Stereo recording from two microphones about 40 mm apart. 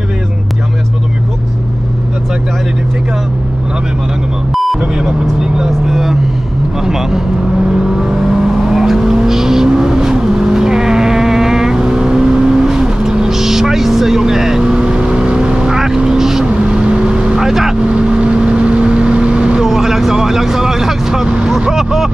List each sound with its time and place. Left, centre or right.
4.9 s vehicle: centre
16.6 s vehicle: right
17.4 s motorboat: centre
17.7 s vehicle: right
21.7 s a sound: centre